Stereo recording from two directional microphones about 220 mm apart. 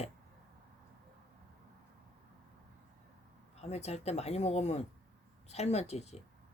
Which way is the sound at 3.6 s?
30° left (ahead or behind).